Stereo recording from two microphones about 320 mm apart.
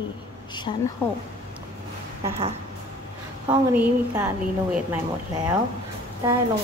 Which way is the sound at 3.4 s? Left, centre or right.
Centre.